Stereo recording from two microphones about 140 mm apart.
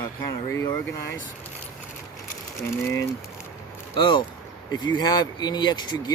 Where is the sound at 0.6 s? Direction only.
25° left (ahead or behind).